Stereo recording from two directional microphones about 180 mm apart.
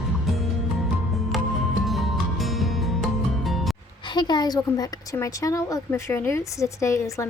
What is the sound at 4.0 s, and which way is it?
Speech, 25° left (ahead or behind).